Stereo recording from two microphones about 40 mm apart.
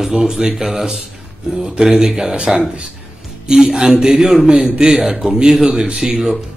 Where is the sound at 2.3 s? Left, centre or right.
Right.